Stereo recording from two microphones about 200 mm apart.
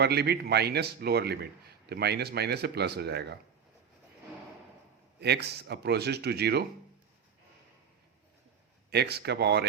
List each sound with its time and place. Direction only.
0.0 s a man's voice: 55° right (ahead or behind)
5.2 s speech: 55° right (ahead or behind)
8.9 s speech: 55° right (ahead or behind)